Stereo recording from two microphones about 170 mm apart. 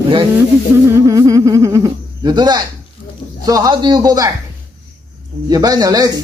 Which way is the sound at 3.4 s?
20° right (ahead or behind).